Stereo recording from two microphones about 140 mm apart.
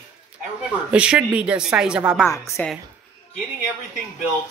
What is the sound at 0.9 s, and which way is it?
Speech, 5° right (ahead or behind).